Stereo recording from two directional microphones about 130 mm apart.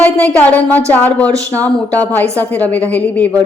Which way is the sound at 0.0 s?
10° left (ahead or behind).